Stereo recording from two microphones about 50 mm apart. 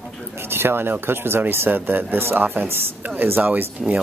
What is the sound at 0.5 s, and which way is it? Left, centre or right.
Speech, right.